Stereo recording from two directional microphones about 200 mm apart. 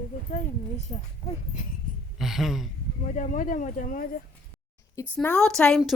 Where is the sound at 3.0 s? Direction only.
40° left (ahead or behind).